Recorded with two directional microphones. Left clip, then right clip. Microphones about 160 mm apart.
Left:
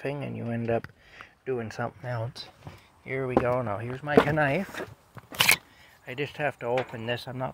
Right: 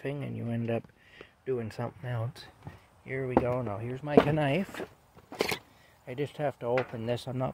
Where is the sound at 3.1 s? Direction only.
5° left (ahead or behind).